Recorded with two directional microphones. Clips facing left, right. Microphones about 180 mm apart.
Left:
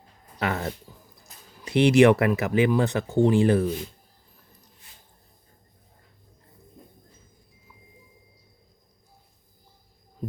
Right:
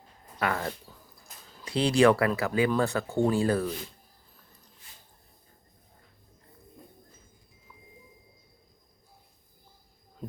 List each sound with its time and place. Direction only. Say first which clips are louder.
0.3 s speech: left 2 dB; 25° left (ahead or behind)